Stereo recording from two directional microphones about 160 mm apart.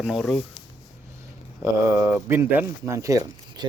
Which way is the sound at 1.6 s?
15° right (ahead or behind).